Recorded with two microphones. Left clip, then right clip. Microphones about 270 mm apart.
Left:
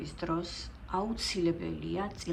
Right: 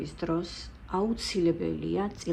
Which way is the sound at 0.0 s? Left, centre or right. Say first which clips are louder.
Right 3 dB; centre.